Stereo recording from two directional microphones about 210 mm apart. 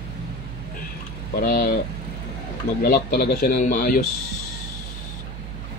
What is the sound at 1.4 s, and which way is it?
Speech, 45° left (ahead or behind).